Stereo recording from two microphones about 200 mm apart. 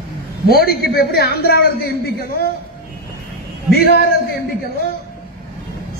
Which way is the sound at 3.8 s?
50° left (ahead or behind).